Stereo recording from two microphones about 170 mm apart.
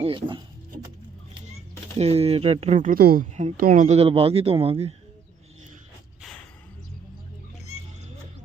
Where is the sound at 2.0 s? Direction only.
35° right (ahead or behind); by 3.2 s 60° right (ahead or behind).